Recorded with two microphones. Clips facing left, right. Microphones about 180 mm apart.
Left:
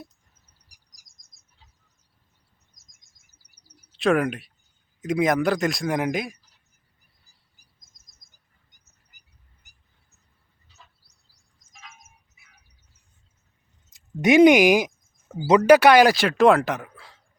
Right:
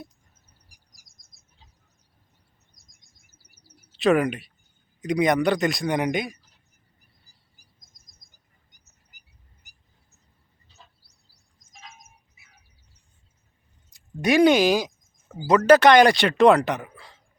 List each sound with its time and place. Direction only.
0.9 s bird: 20° left (ahead or behind)
3.2 s chirp: 15° left (ahead or behind)
3.8 s speech: centre (ahead or behind)
7.5 s a sound: 20° left (ahead or behind)
13.9 s speech: 20° left (ahead or behind); by 17.2 s centre (ahead or behind)